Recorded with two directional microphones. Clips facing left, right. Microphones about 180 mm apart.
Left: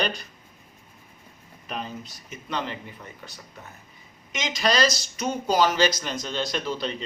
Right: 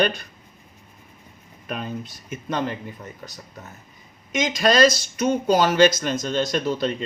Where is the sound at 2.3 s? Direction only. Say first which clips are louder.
Right 5 dB; 45° right (ahead or behind).